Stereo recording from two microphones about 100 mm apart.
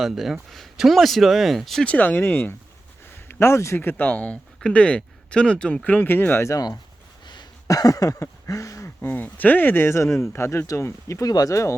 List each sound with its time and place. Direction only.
0.0 s speech: centre (ahead or behind)
1.9 s speech: 15° left (ahead or behind)
7.3 s a sound: 45° left (ahead or behind)
9.0 s speech: 20° left (ahead or behind)